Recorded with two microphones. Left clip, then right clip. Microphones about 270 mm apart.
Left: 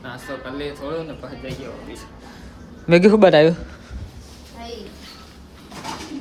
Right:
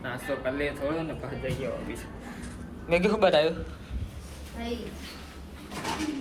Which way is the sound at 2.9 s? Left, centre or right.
Left.